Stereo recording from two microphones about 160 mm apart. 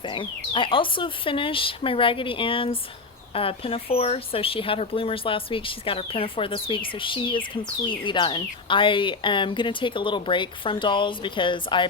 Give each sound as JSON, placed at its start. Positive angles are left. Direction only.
{"t": 0.0, "sound": "speech", "side_deg": 30}